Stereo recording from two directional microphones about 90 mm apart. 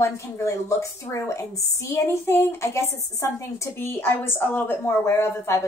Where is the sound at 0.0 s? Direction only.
35° left (ahead or behind).